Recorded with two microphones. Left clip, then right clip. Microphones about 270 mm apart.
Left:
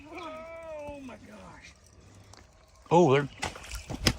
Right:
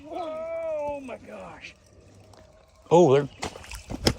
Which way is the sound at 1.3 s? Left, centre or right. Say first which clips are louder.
Right 8 dB; right.